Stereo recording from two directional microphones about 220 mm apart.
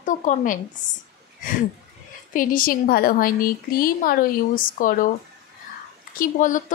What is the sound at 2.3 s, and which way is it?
A woman's voice, 40° left (ahead or behind).